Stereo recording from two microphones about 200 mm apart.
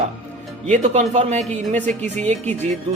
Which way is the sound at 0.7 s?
35° right (ahead or behind).